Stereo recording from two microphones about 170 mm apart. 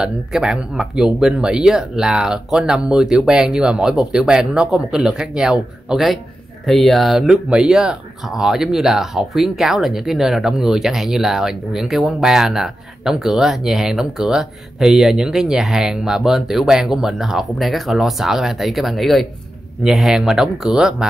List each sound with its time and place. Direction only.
0.0 s speech: 5° right (ahead or behind)